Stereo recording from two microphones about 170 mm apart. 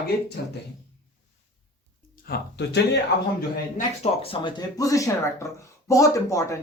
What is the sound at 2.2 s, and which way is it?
Speech, 75° left (ahead or behind).